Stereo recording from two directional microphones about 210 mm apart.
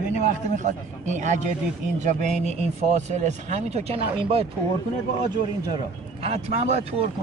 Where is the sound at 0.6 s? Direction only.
35° right (ahead or behind).